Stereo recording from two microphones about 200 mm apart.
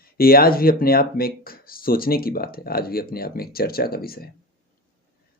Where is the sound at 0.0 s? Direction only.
50° left (ahead or behind).